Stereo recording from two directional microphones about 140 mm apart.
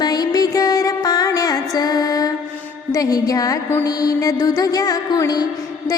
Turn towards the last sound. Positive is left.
turn(degrees=25)  # may be behind; listen again after turning